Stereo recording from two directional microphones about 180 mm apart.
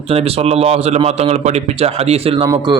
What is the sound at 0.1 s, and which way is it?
A man's voice, 35° right (ahead or behind).